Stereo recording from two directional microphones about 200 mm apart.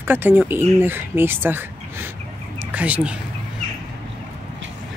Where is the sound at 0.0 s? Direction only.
10° right (ahead or behind).